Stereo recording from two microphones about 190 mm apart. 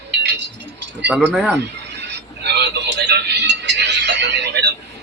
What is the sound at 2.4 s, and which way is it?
Speech, 60° right (ahead or behind).